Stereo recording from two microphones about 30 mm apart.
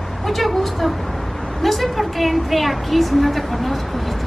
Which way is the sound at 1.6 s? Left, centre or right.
Centre.